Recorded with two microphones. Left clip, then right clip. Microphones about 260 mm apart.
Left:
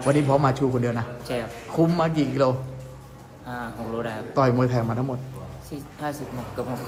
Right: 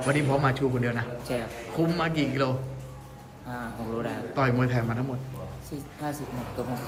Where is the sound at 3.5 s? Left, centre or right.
Centre.